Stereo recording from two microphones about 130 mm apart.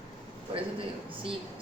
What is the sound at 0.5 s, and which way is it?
Speech, 45° right (ahead or behind).